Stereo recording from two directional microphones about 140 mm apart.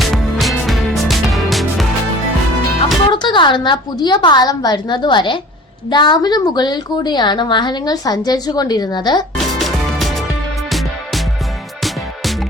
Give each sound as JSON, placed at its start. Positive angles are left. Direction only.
{"t": 0.0, "sound": "music", "side_deg": 0}
{"t": 3.1, "sound": "a woman's voice", "side_deg": 35}
{"t": 9.4, "sound": "music", "side_deg": 0}